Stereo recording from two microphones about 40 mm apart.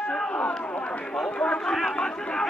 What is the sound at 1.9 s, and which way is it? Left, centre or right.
Chatter, centre.